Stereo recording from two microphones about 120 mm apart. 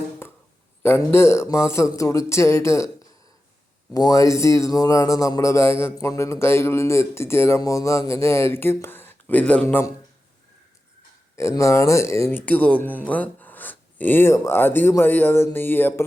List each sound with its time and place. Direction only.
0.8 s speech: 20° left (ahead or behind)
3.9 s speech: 30° left (ahead or behind)
11.3 s speech: 25° left (ahead or behind)